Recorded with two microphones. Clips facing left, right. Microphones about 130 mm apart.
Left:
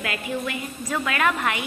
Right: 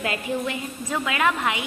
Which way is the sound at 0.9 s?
15° right (ahead or behind).